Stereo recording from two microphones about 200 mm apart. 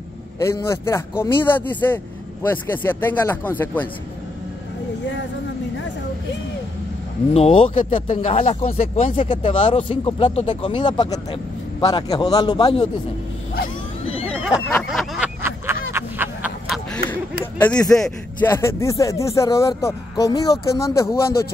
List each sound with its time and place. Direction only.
0.4 s speech: 15° left (ahead or behind)
7.3 s speech: 30° left (ahead or behind)
14.0 s vehicle: 30° left (ahead or behind)
14.8 s a sound: centre (ahead or behind)
16.9 s a sound: 10° left (ahead or behind)
17.9 s speech: 10° left (ahead or behind)